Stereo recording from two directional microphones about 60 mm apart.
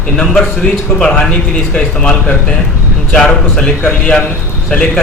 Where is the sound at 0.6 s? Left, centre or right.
Left.